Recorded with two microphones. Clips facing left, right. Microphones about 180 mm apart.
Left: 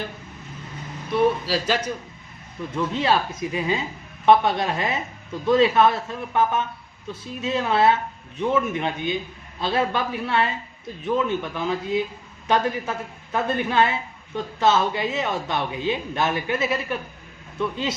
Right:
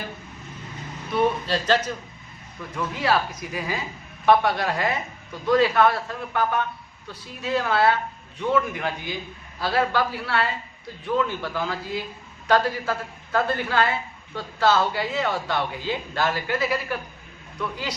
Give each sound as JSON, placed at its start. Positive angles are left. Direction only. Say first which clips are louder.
{"t": 1.1, "sound": "a man's voice", "louder": "left 2 dB", "side_deg": 5}
{"t": 2.7, "sound": "a woman's voice", "louder": "left 2 dB", "side_deg": 25}